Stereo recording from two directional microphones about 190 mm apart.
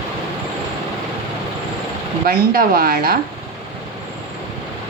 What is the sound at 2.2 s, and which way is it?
Speech, 50° right (ahead or behind).